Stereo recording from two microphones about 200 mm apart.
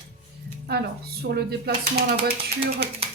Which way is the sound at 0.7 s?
55° right (ahead or behind).